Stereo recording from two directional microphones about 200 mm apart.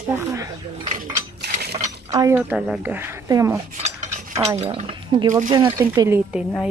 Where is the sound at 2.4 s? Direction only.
5° right (ahead or behind).